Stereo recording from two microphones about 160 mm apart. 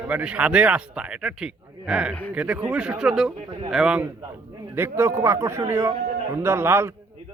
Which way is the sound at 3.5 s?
30° right (ahead or behind).